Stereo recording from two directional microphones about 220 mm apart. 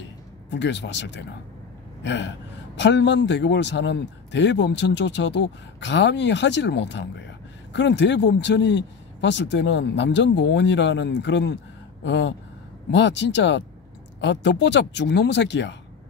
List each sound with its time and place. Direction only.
0.5 s a man's voice: 55° left (ahead or behind)